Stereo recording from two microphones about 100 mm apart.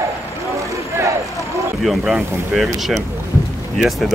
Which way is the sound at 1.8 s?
5° right (ahead or behind).